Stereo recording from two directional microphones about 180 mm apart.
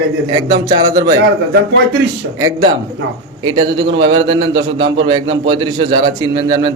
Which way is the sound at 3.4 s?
25° right (ahead or behind).